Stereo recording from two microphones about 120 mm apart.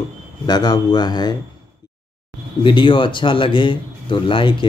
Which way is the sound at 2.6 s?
40° left (ahead or behind).